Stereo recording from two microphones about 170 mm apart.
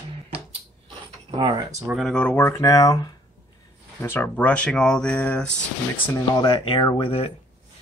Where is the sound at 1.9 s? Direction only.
Centre (ahead or behind); by 3.2 s 25° left (ahead or behind).